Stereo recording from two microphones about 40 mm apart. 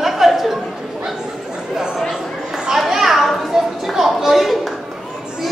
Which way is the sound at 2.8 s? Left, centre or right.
Centre.